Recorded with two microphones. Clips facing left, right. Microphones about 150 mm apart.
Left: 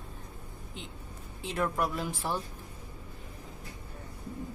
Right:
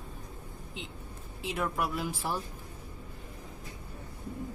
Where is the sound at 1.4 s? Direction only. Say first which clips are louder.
Left 2 dB; 5° right (ahead or behind).